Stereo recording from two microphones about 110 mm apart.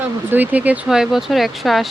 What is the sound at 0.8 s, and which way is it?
Speech, 5° right (ahead or behind).